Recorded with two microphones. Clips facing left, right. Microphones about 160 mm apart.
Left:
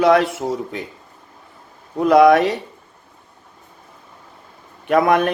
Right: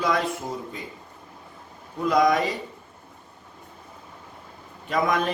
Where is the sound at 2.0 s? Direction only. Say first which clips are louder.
Left 9 dB; 70° left (ahead or behind).